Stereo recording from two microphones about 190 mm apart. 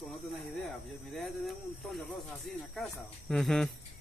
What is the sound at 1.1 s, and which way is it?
Speech, centre (ahead or behind).